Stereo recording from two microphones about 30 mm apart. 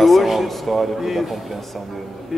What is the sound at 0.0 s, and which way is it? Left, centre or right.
A man's voice, centre.